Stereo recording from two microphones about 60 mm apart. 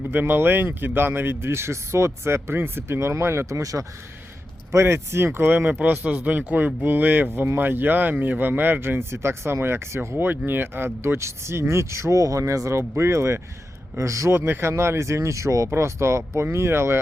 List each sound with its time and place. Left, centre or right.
0.1 s speech: right
4.7 s speech: right
14.3 s speech: right
15.7 s speech: right